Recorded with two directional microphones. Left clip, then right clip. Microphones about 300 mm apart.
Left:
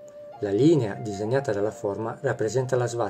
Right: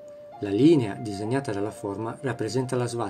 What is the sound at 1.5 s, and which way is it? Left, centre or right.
Speech, right.